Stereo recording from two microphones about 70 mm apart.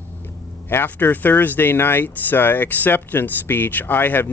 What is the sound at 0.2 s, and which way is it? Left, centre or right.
Speech, left.